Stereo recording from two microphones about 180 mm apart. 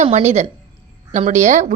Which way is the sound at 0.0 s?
40° right (ahead or behind).